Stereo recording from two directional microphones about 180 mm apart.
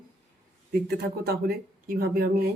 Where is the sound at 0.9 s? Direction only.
60° right (ahead or behind).